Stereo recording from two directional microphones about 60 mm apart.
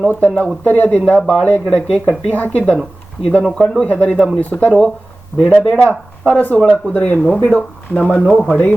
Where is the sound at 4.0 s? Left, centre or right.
Centre.